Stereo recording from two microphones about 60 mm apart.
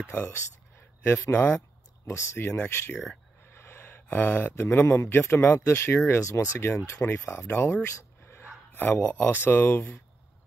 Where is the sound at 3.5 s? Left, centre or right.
Left.